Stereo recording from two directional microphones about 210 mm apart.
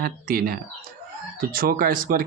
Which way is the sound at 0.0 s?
45° right (ahead or behind).